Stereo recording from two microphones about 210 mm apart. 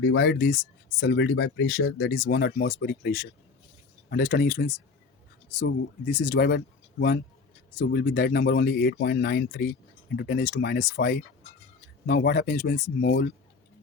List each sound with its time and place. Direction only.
0.0 s speech: 60° left (ahead or behind)
2.1 s speech: 45° left (ahead or behind)
6.2 s speech: 45° left (ahead or behind)
7.8 s speech: 55° left (ahead or behind)